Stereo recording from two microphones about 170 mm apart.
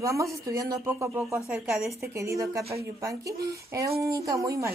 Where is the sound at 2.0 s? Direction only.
15° right (ahead or behind).